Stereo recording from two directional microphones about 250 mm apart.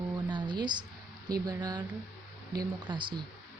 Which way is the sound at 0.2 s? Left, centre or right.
Centre.